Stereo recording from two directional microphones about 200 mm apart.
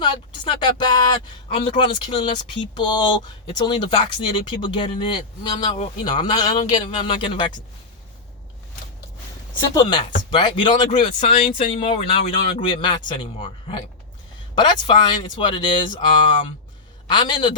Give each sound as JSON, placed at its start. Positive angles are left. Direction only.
{"t": 0.0, "sound": "speech", "side_deg": 25}
{"t": 5.7, "sound": "speech", "side_deg": 30}
{"t": 6.1, "sound": "speech", "side_deg": 20}
{"t": 9.7, "sound": "speech", "side_deg": 20}